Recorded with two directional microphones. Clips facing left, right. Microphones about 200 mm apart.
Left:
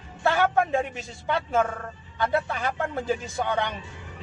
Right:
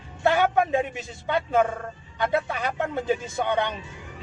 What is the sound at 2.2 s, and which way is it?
Speech, 20° right (ahead or behind).